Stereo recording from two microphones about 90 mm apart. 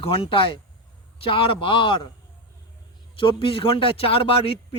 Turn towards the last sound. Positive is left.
turn(degrees=90)